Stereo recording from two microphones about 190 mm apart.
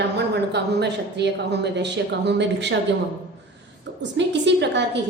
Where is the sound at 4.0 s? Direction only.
65° right (ahead or behind).